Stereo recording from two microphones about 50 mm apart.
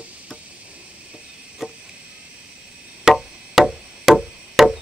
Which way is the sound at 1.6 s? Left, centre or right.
Centre.